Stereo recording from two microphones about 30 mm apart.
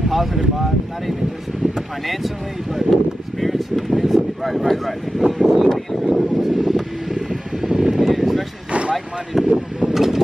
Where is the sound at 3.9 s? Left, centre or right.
Centre.